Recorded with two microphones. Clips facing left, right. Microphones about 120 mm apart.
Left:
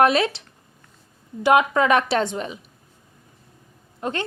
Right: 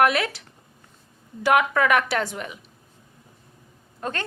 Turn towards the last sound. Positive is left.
turn(degrees=20)  # may be behind; listen again after turning